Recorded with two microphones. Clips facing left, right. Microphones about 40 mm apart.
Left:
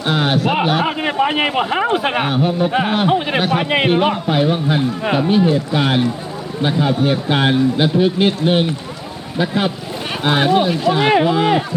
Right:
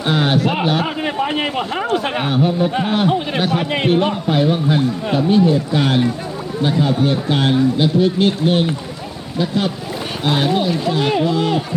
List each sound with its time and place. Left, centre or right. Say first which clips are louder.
0.0 s a man's voice: even; centre
3.1 s a man's voice: left 2 dB; left